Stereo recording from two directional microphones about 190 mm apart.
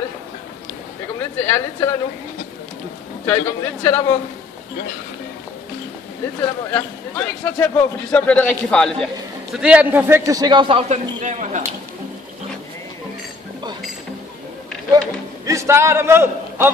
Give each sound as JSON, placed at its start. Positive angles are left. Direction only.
{"t": 1.2, "sound": "a man's voice", "side_deg": 15}
{"t": 3.3, "sound": "a man's voice", "side_deg": 10}
{"t": 6.7, "sound": "a man's voice", "side_deg": 5}
{"t": 10.9, "sound": "a man's voice", "side_deg": -40}
{"t": 15.4, "sound": "a man's voice", "side_deg": -15}